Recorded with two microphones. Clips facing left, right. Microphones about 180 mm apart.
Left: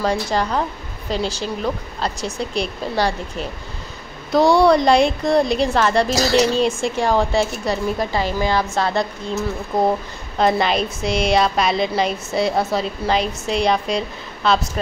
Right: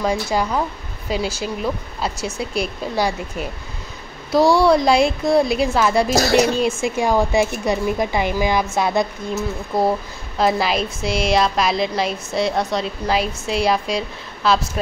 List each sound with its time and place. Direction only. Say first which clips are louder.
0.0 s a woman's voice: even; 5° right (ahead or behind)
4.6 s a woman's voice: left 1 dB; centre (ahead or behind)
6.1 s speech: right 1 dB; 50° right (ahead or behind)
6.6 s a woman's voice: even; 5° right (ahead or behind)